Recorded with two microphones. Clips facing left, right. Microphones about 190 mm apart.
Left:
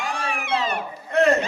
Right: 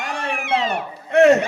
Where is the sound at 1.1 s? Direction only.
75° right (ahead or behind).